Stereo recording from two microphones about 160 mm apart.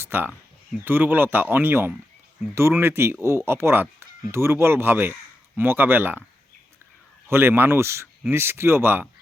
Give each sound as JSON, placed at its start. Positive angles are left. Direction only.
{"t": 0.0, "sound": "speech", "side_deg": -15}
{"t": 7.3, "sound": "speech", "side_deg": -15}